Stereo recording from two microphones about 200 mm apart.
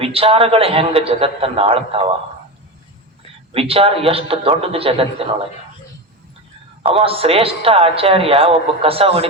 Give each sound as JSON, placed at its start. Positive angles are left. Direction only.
{"t": 0.0, "sound": "a man's voice", "side_deg": -30}
{"t": 3.5, "sound": "a man's voice", "side_deg": -30}
{"t": 6.8, "sound": "a man's voice", "side_deg": -25}